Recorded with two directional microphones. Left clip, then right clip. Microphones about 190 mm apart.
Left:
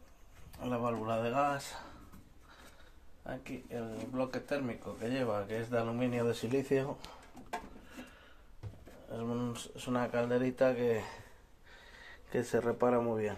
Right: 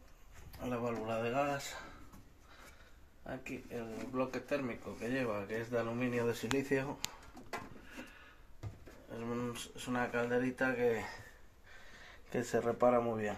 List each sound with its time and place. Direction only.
0.6 s speech: 25° left (ahead or behind)
3.3 s speech: 30° left (ahead or behind)
9.1 s speech: 30° left (ahead or behind)
12.3 s speech: 10° left (ahead or behind)